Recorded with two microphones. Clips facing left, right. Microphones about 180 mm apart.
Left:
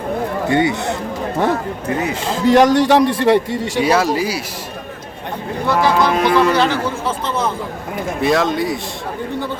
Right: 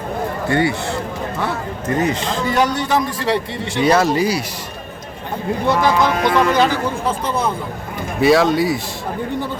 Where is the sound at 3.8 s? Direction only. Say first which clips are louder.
Right 1 dB; 5° left (ahead or behind).